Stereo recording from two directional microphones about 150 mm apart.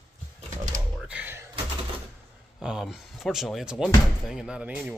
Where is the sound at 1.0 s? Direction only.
10° right (ahead or behind).